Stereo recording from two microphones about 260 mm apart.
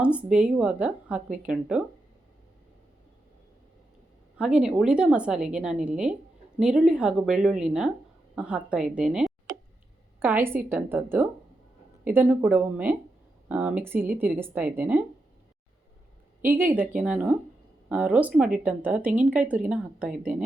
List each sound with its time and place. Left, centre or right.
0.0 s speech: centre
4.4 s speech: centre
16.4 s speech: centre